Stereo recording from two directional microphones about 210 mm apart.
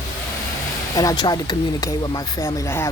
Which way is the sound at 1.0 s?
20° left (ahead or behind).